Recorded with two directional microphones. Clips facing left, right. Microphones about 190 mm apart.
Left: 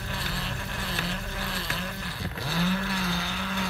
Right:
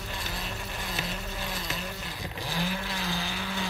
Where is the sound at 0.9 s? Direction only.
20° right (ahead or behind).